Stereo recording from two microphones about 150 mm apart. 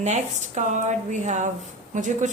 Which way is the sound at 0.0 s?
50° right (ahead or behind).